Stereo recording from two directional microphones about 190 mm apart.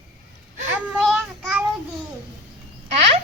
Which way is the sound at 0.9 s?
Centre (ahead or behind).